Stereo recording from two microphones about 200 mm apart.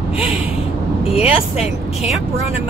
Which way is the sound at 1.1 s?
30° left (ahead or behind).